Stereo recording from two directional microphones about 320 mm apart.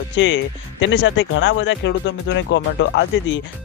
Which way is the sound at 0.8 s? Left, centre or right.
Left.